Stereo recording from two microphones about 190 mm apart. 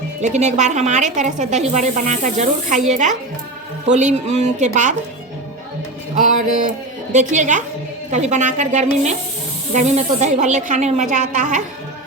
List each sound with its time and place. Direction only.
0.2 s speech: 40° right (ahead or behind)
6.1 s speech: 40° right (ahead or behind)